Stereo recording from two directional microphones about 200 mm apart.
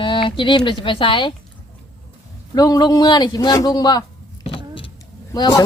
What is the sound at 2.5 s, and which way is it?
A man's voice, 20° left (ahead or behind).